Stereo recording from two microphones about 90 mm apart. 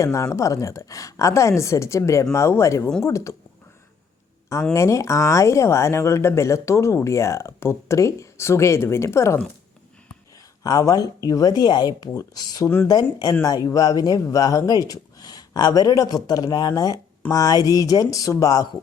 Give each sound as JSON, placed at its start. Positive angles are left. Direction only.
{"t": 0.0, "sound": "speech", "side_deg": 35}
{"t": 4.7, "sound": "speech", "side_deg": 35}
{"t": 10.6, "sound": "speech", "side_deg": 40}
{"t": 12.6, "sound": "speech", "side_deg": 25}
{"t": 12.9, "sound": "speech", "side_deg": 50}